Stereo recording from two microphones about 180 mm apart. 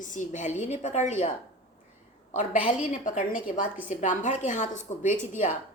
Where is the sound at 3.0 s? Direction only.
45° left (ahead or behind).